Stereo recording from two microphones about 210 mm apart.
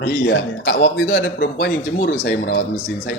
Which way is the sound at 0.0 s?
55° left (ahead or behind).